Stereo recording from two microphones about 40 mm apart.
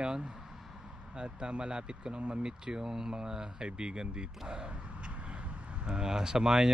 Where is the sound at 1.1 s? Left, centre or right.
Right.